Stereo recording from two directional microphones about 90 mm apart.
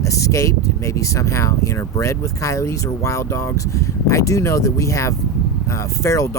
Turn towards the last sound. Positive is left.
turn(degrees=35)  # may be behind; listen again after turning